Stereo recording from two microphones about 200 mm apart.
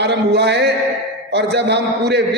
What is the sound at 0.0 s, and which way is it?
A man's voice, 55° right (ahead or behind).